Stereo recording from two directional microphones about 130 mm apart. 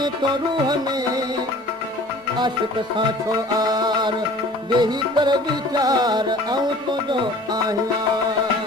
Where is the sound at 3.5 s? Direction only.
30° right (ahead or behind).